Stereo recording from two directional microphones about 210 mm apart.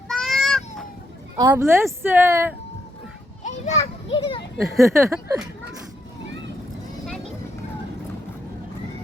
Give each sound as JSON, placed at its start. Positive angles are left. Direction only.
{"t": 0.1, "sound": "a sound", "side_deg": 0}
{"t": 1.4, "sound": "speech", "side_deg": -15}
{"t": 3.4, "sound": "children playing", "side_deg": 30}
{"t": 4.5, "sound": "speech", "side_deg": 0}
{"t": 4.8, "sound": "speech", "side_deg": -10}